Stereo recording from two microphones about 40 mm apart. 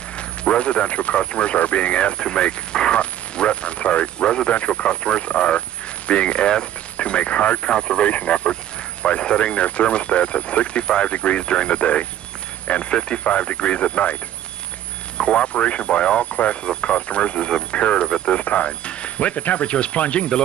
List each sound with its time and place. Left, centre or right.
0.4 s speech: left
15.1 s speech: left
18.0 s speech: centre
18.4 s speech: left